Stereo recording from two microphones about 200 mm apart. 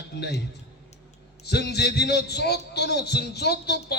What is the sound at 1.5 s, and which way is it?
A man's voice, 55° left (ahead or behind).